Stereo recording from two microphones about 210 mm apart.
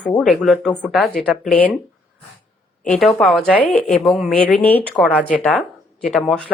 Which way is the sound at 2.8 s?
Centre (ahead or behind).